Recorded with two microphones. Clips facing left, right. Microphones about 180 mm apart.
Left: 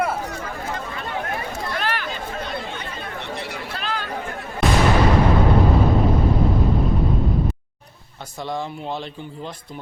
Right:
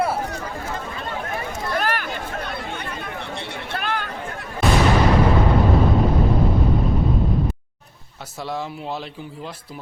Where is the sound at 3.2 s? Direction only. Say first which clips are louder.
Left 1 dB; 30° right (ahead or behind).